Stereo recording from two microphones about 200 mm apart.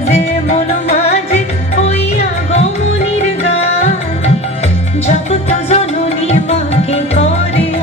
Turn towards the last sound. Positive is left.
turn(degrees=30)  # may be behind; listen again after turning